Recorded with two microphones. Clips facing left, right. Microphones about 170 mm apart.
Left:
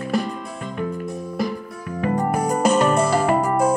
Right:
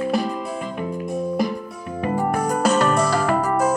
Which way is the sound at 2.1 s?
5° right (ahead or behind).